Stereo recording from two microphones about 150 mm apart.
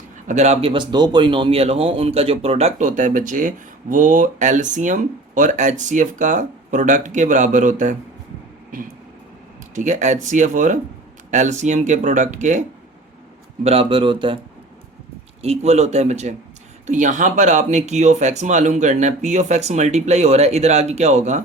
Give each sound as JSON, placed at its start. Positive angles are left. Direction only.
{"t": 0.3, "sound": "speech", "side_deg": -50}
{"t": 9.7, "sound": "speech", "side_deg": -55}
{"t": 13.7, "sound": "speech", "side_deg": -40}
{"t": 15.4, "sound": "speech", "side_deg": -45}